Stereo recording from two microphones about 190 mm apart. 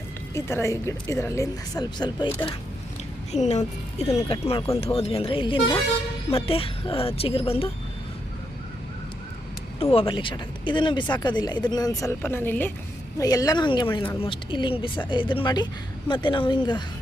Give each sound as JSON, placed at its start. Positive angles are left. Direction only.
{"t": 0.3, "sound": "a woman's voice", "side_deg": 15}
{"t": 3.3, "sound": "speech", "side_deg": 35}
{"t": 9.8, "sound": "speech", "side_deg": 30}